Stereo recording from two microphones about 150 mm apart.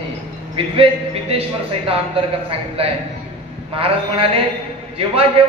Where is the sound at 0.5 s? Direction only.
40° right (ahead or behind).